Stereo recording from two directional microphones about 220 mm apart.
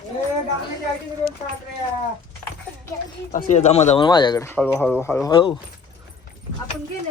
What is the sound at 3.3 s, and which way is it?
Speech, 30° left (ahead or behind).